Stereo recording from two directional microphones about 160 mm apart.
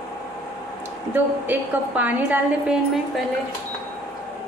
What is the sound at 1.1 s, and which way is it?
A woman's voice, 10° right (ahead or behind).